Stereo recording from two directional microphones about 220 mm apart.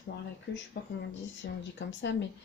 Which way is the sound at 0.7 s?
50° left (ahead or behind).